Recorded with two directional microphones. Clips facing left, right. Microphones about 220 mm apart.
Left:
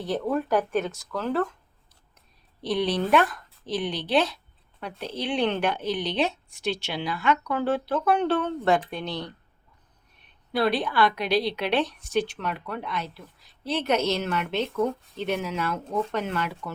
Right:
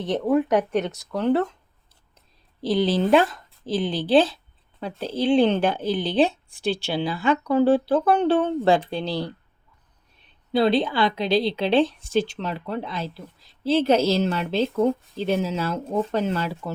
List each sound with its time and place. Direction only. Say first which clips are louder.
0.0 s a woman's voice: right 5 dB; 20° right (ahead or behind)
2.6 s a woman's voice: right 4 dB; 25° right (ahead or behind)
10.5 s a woman's voice: right 5 dB; 25° right (ahead or behind)